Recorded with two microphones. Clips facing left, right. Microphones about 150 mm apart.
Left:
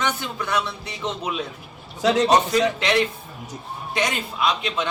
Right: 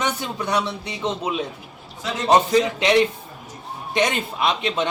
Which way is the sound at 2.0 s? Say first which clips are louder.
Left 10 dB; 75° left (ahead or behind).